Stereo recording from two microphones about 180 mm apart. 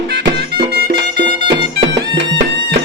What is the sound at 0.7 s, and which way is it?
Music, 60° right (ahead or behind).